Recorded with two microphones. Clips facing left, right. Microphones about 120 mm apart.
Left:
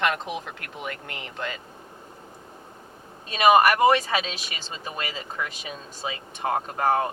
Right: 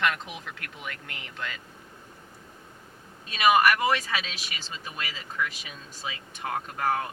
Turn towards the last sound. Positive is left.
turn(degrees=30)  # may be behind; listen again after turning